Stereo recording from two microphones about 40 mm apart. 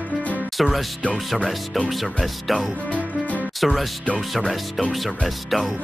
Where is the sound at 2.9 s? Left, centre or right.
Left.